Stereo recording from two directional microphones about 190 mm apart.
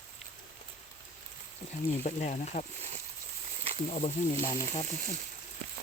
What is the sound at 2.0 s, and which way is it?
Speech, 40° left (ahead or behind).